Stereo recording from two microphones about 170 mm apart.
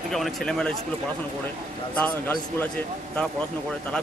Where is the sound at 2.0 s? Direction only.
10° left (ahead or behind).